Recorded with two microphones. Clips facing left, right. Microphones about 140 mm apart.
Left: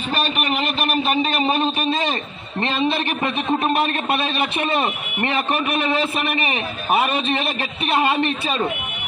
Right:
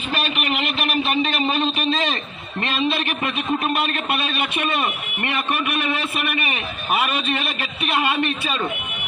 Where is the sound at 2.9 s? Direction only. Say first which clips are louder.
Left 2 dB; 25° left (ahead or behind).